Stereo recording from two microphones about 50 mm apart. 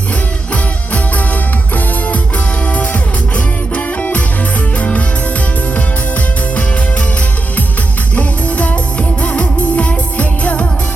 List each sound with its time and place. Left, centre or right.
2.7 s music: left
8.1 s music: left